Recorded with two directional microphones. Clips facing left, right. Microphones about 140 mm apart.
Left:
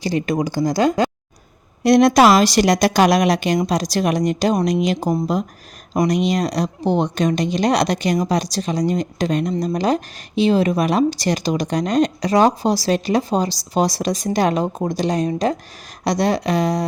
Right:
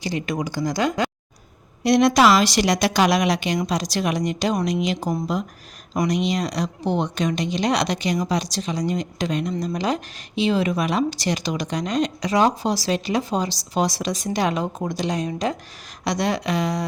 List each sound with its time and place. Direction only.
0.0 s speech: 40° left (ahead or behind)
1.8 s a woman's voice: 45° left (ahead or behind)